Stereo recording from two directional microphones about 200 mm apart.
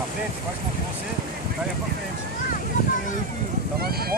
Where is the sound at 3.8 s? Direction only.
50° right (ahead or behind).